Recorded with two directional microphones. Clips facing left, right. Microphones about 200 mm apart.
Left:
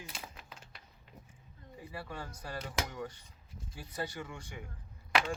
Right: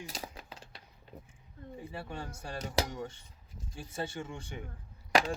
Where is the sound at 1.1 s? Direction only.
60° right (ahead or behind).